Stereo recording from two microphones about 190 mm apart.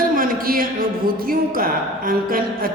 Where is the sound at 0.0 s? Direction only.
45° right (ahead or behind).